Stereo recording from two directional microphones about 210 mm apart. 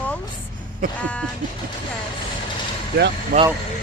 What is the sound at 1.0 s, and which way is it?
Speech, 5° left (ahead or behind).